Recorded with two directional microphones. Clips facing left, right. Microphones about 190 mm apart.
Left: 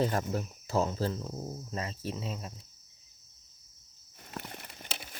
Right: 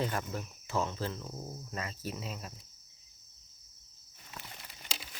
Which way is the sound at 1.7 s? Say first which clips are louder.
Left 2 dB; 30° left (ahead or behind).